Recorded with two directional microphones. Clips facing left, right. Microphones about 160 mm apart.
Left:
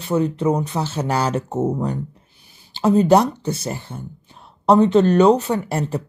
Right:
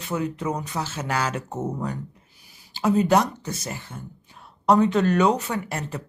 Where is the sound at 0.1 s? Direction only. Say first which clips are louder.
Left 8 dB; 30° left (ahead or behind).